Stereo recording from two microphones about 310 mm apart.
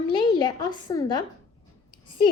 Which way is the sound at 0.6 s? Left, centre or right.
Centre.